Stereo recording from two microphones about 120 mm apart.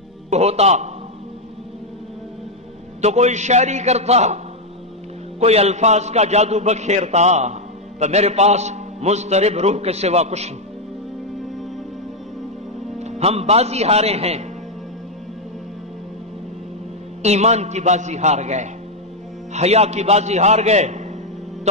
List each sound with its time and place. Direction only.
0.3 s a man's voice: 65° right (ahead or behind)
3.0 s a man's voice: 70° right (ahead or behind)
5.4 s a man's voice: 60° right (ahead or behind)
13.0 s a man's voice: 60° right (ahead or behind)
17.2 s a man's voice: 65° right (ahead or behind)